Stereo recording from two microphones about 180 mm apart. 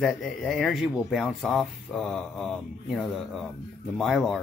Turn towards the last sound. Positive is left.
turn(degrees=0)  # may be behind; listen again after turning